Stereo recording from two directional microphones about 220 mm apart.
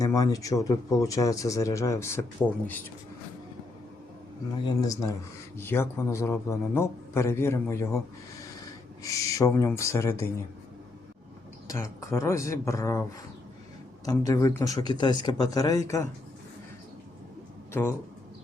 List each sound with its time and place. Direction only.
0.0 s a man's voice: 15° left (ahead or behind)
4.6 s a man's voice: 15° left (ahead or behind)
9.0 s a man's voice: 15° left (ahead or behind)
11.7 s a man's voice: 15° left (ahead or behind)
17.7 s a man's voice: 5° left (ahead or behind)